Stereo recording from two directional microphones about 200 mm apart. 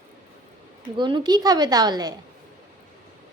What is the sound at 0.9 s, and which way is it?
A woman's voice, 25° right (ahead or behind).